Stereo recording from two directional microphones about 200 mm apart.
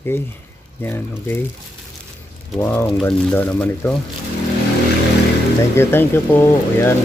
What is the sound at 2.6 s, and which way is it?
Speech, 10° left (ahead or behind).